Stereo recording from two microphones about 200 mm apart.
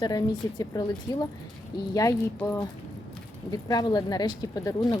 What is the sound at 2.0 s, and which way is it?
Speech, 10° left (ahead or behind).